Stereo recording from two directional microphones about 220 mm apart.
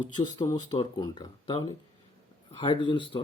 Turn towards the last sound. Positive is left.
turn(degrees=20)  # may be behind; listen again after turning